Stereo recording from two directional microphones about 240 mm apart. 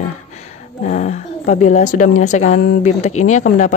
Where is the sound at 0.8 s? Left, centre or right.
Left.